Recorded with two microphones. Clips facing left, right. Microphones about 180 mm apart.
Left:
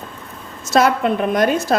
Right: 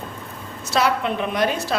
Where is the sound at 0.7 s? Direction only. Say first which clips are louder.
Left 5 dB; 45° left (ahead or behind).